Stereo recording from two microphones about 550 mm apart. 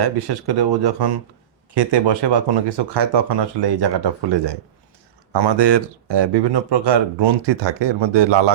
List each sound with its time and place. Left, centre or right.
0.0 s speech: right